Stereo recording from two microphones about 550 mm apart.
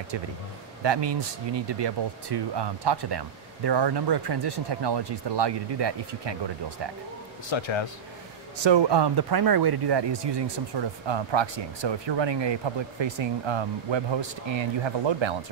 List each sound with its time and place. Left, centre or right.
0.8 s speech: right
7.4 s speech: left
8.5 s speech: right